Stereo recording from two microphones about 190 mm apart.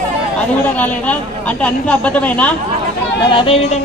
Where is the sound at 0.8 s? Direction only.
5° left (ahead or behind).